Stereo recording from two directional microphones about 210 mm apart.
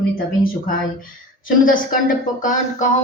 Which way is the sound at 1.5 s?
40° left (ahead or behind).